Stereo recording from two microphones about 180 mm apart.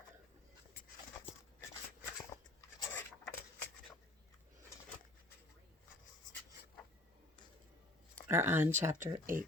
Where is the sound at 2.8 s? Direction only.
15° left (ahead or behind).